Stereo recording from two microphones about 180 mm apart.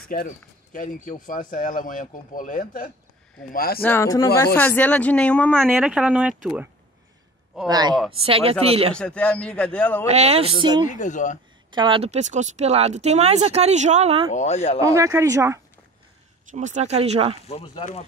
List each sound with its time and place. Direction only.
0.1 s speech: 50° left (ahead or behind)
3.8 s a man's voice: 15° left (ahead or behind)
5.6 s speech: 10° right (ahead or behind)
7.6 s speech: 20° right (ahead or behind)
8.1 s speech: 30° right (ahead or behind)
8.9 s a man's voice: 5° left (ahead or behind)
10.0 s speech: 35° right (ahead or behind)
10.9 s speech: 45° left (ahead or behind)
11.7 s speech: 25° right (ahead or behind)
14.3 s speech: 40° left (ahead or behind)
15.0 s speech: 15° right (ahead or behind)
16.5 s speech: 40° right (ahead or behind)
17.5 s speech: 35° left (ahead or behind)